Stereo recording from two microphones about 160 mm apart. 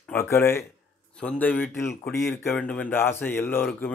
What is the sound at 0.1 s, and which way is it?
Speech, 15° left (ahead or behind).